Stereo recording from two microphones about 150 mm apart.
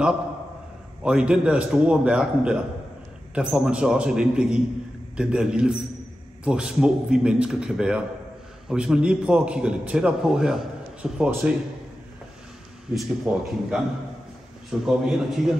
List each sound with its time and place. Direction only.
1.0 s a man's voice: 5° right (ahead or behind)
12.9 s a man's voice: 5° right (ahead or behind)